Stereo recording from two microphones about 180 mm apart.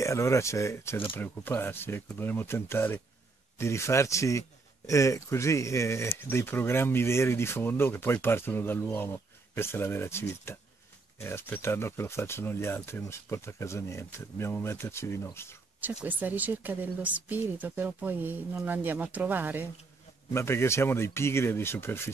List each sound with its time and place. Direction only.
0.0 s a man's voice: 15° left (ahead or behind)
16.0 s speech: 10° right (ahead or behind)
20.3 s a man's voice: 15° left (ahead or behind)